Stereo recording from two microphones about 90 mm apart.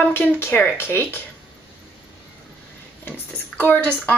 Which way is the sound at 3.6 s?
20° left (ahead or behind).